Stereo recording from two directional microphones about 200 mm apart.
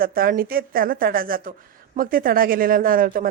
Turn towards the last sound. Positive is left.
turn(degrees=-45)  # may be behind; listen again after turning